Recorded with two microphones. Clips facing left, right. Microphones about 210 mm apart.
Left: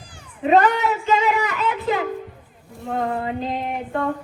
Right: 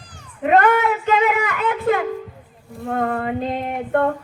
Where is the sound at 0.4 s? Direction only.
55° right (ahead or behind).